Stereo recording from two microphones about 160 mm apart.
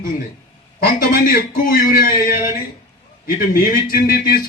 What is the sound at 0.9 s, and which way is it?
A man's voice, 65° left (ahead or behind).